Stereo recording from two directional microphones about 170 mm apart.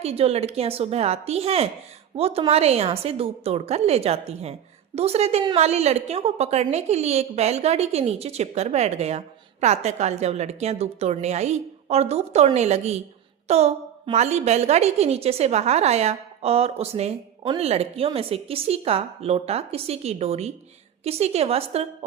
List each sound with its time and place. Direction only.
0.0 s a woman's voice: 35° right (ahead or behind)